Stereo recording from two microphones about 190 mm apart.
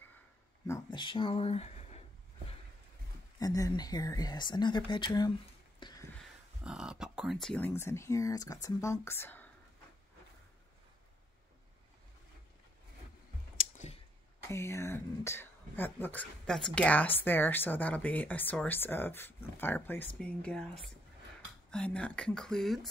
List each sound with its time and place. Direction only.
0.7 s speech: 20° left (ahead or behind)
3.3 s speech: 20° left (ahead or behind)
5.8 s a sound: 20° left (ahead or behind)
6.6 s speech: 5° right (ahead or behind)
13.6 s clicking: 40° left (ahead or behind)
14.5 s speech: 15° left (ahead or behind)